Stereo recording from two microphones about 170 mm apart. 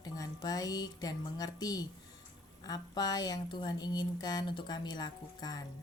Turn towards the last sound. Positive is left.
turn(degrees=25)  # may be behind; listen again after turning